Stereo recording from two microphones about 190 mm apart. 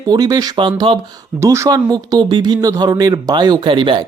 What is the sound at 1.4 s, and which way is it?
Speech, 15° right (ahead or behind).